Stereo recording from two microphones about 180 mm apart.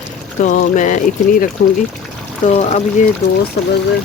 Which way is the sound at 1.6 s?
55° left (ahead or behind).